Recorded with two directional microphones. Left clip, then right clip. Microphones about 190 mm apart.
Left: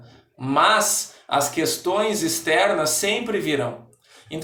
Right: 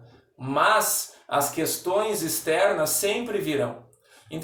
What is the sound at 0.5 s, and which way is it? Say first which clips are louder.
Speech: left 3 dB; 10° right (ahead or behind).